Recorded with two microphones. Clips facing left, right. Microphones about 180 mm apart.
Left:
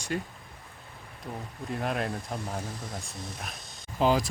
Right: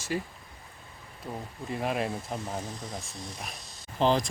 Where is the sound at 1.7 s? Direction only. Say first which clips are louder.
Right 1 dB; centre (ahead or behind).